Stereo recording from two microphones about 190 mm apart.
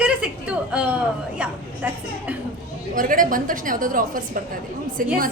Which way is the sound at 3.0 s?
45° right (ahead or behind).